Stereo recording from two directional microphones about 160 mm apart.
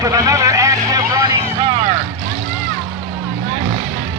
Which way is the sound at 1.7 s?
35° right (ahead or behind).